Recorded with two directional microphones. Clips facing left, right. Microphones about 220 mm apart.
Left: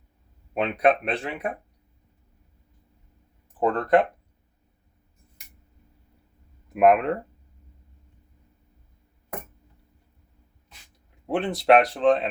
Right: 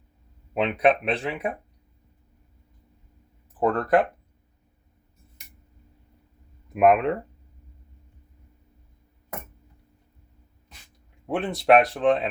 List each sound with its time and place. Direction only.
0.6 s speech: centre (ahead or behind)
3.6 s speech: 5° right (ahead or behind)
6.7 s speech: centre (ahead or behind)
11.3 s speech: centre (ahead or behind)